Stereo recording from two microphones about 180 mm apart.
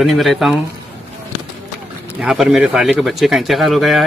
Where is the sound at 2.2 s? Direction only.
Centre (ahead or behind).